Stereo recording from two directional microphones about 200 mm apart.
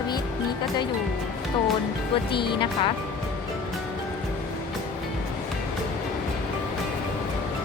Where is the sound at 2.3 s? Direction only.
25° left (ahead or behind).